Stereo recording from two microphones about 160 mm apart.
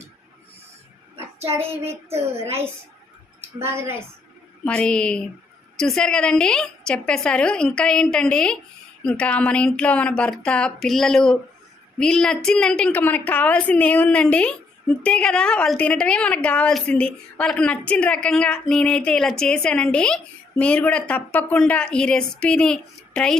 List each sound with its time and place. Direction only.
1.2 s child singing: 40° right (ahead or behind)
1.5 s child singing: 15° right (ahead or behind)
4.6 s a woman's voice: 5° left (ahead or behind)